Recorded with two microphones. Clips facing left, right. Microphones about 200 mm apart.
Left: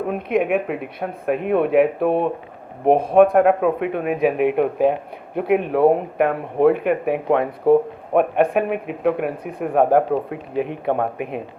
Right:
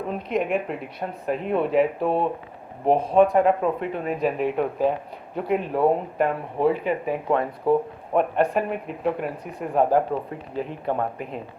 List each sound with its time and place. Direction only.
0.1 s speech: 60° left (ahead or behind)